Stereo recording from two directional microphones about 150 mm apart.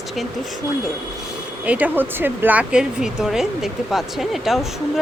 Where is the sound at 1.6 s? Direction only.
10° right (ahead or behind).